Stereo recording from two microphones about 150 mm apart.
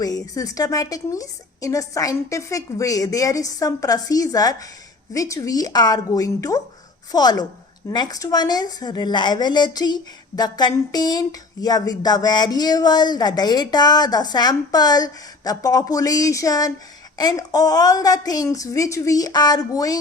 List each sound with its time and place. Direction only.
0.0 s a woman's voice: 25° left (ahead or behind)